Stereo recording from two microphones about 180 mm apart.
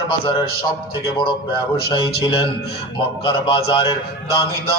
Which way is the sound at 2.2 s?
25° left (ahead or behind).